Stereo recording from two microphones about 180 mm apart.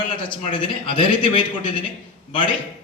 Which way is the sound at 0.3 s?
25° left (ahead or behind).